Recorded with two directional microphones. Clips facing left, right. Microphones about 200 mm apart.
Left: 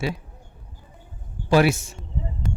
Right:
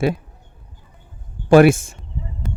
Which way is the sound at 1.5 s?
50° right (ahead or behind).